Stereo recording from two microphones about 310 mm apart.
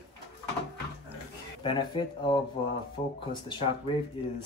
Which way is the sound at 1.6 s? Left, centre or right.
Centre.